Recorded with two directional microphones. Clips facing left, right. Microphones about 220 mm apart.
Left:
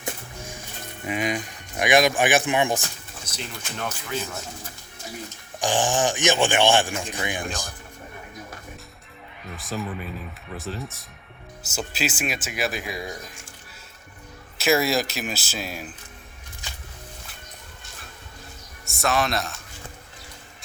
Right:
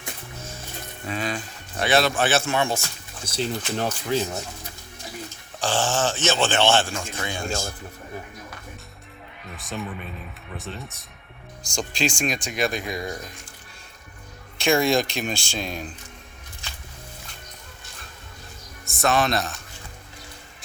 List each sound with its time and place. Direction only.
1.0 s speech: 15° left (ahead or behind)
3.2 s speech: 30° right (ahead or behind)
5.5 s speech: 15° left (ahead or behind)
9.6 s speech: centre (ahead or behind)
14.6 s speech: 5° left (ahead or behind)
18.9 s speech: centre (ahead or behind)